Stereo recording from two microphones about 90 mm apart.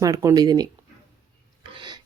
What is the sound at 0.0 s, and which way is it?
Speech, 40° right (ahead or behind).